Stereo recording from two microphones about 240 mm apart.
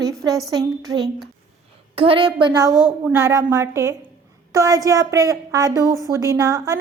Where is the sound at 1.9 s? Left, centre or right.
Right.